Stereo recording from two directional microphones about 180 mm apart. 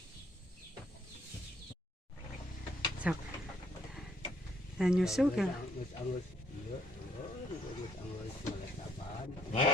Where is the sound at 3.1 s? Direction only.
5° right (ahead or behind).